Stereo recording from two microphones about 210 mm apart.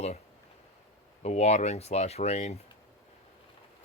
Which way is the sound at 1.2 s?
30° left (ahead or behind).